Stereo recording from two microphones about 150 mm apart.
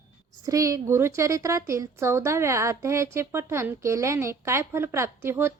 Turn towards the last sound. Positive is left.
turn(degrees=-15)  # may be behind; listen again after turning